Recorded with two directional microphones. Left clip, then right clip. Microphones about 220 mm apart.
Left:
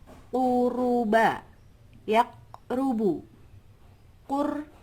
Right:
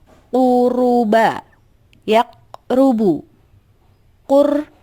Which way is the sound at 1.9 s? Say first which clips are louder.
Right 8 dB; 45° right (ahead or behind).